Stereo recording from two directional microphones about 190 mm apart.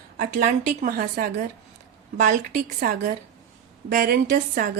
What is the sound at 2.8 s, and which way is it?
A woman's voice, 45° right (ahead or behind).